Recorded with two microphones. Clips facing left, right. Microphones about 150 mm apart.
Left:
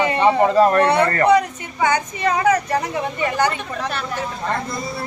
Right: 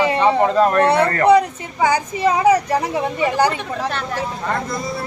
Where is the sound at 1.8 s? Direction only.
5° right (ahead or behind).